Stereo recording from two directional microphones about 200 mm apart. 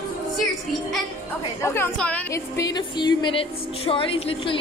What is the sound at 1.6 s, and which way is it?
A woman's voice, 10° left (ahead or behind).